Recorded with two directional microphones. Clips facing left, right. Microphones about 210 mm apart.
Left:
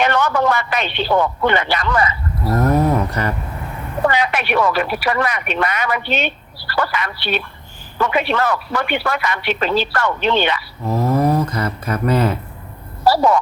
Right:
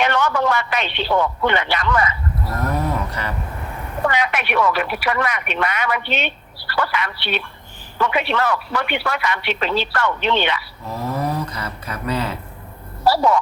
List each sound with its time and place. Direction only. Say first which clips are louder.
0.0 s a woman's voice: left 2 dB; 40° left (ahead or behind)
4.0 s a woman's voice: left 3 dB; 35° left (ahead or behind)